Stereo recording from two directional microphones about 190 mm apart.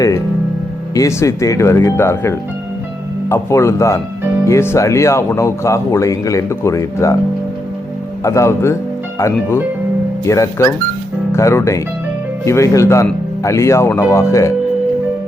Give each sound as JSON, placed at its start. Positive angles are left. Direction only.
{"t": 0.9, "sound": "speech", "side_deg": 15}
{"t": 8.2, "sound": "speech", "side_deg": 15}